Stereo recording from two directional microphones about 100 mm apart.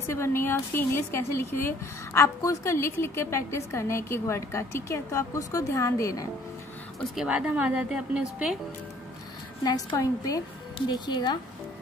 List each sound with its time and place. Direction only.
0.0 s a woman's voice: 25° left (ahead or behind)
7.2 s a woman's voice: 10° right (ahead or behind)
9.9 s a woman's voice: 35° left (ahead or behind)